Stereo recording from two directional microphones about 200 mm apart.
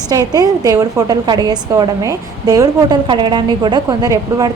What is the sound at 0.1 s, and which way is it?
A woman's voice, 15° right (ahead or behind).